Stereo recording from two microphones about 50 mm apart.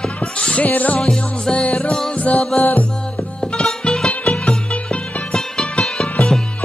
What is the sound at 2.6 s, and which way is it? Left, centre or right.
Music, left.